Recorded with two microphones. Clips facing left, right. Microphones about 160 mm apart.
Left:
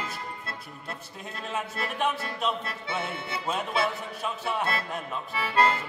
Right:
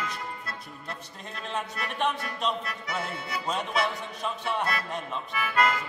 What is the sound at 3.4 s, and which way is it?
Speech, 5° left (ahead or behind).